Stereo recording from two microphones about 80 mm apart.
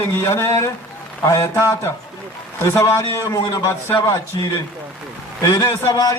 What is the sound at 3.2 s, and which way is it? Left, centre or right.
Speech, left.